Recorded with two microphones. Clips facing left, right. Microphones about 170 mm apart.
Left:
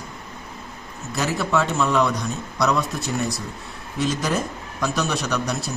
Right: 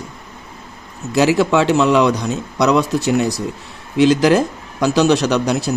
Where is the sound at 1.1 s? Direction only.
85° right.